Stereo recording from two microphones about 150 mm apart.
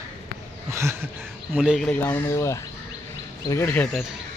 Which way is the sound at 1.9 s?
15° left (ahead or behind).